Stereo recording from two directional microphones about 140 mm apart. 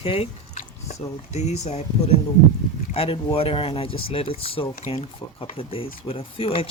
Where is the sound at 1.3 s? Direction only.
55° left (ahead or behind).